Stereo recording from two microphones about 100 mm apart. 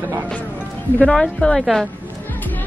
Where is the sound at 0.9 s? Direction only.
5° left (ahead or behind).